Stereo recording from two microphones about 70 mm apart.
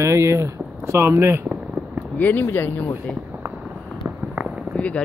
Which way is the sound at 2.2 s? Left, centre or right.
Left.